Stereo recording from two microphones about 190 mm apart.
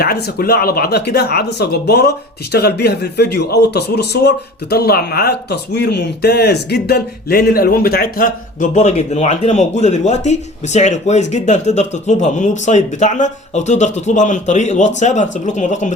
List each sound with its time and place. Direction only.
0.0 s speech: 55° left (ahead or behind)
8.7 s speech: 35° left (ahead or behind)